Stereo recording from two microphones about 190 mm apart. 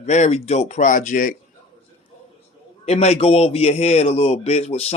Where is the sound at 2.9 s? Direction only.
35° left (ahead or behind).